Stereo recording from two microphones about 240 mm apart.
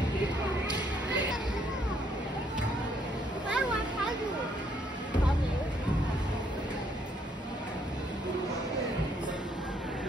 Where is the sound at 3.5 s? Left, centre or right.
Centre.